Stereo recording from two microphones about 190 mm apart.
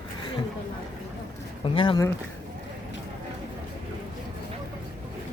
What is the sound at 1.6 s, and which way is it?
Speech, 30° left (ahead or behind).